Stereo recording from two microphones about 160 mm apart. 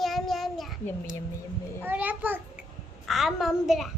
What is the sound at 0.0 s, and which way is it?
Child singing, centre (ahead or behind).